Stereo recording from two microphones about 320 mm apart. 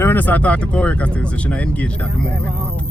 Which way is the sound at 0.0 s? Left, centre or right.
Centre.